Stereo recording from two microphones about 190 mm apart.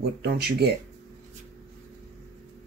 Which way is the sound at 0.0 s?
55° right (ahead or behind).